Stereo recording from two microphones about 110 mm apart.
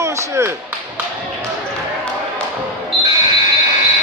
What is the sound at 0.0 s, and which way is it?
Speech, 25° right (ahead or behind).